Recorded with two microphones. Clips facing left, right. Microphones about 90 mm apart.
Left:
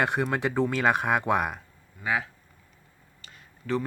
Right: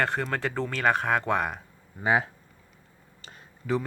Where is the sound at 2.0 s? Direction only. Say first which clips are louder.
Right 4 dB; 25° right (ahead or behind).